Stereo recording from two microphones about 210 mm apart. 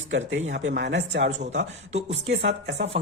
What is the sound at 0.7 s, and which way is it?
Speech, 55° right (ahead or behind).